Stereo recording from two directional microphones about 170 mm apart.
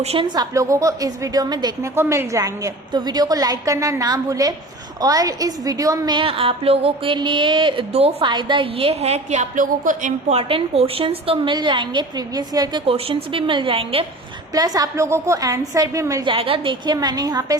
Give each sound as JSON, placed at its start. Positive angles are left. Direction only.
{"t": 0.0, "sound": "a woman's voice", "side_deg": -35}
{"t": 12.8, "sound": "a woman's voice", "side_deg": -35}
{"t": 14.5, "sound": "a woman's voice", "side_deg": -20}